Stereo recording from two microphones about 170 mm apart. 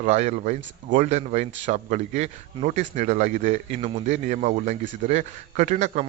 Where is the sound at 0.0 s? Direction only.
40° right (ahead or behind).